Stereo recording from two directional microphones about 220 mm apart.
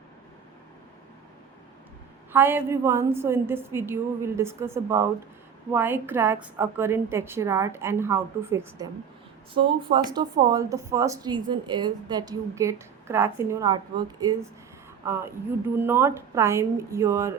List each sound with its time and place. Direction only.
2.3 s speech: 10° right (ahead or behind)